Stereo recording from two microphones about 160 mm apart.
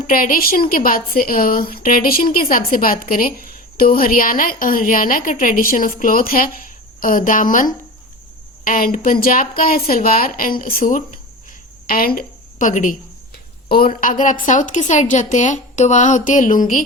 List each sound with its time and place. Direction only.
0.1 s a woman's voice: 60° left (ahead or behind)
11.9 s a woman's voice: 65° left (ahead or behind)
13.3 s a woman's voice: 70° left (ahead or behind)